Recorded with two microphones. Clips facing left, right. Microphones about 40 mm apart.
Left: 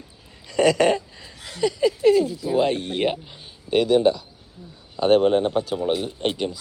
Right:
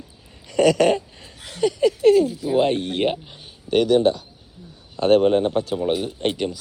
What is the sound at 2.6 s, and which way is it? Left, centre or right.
Speech, right.